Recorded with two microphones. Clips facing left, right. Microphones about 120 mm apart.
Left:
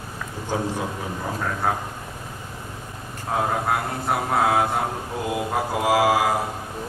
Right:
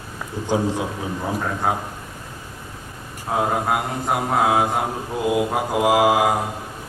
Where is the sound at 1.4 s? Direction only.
10° right (ahead or behind).